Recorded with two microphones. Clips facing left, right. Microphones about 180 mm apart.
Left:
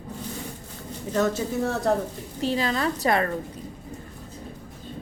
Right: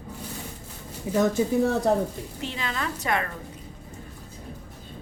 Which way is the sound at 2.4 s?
35° left (ahead or behind).